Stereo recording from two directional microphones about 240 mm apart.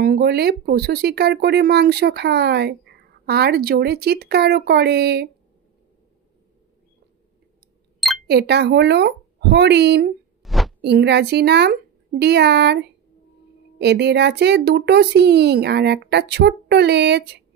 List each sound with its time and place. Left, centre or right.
0.0 s speech: right
8.3 s speech: right
10.4 s a sound: centre
10.8 s speech: right